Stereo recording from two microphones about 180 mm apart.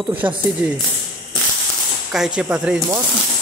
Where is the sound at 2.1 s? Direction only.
5° right (ahead or behind).